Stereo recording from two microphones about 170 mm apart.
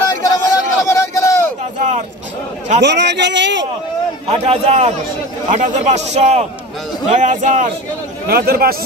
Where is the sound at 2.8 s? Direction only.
90° right.